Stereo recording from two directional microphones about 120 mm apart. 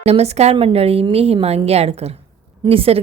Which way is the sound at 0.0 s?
60° right (ahead or behind).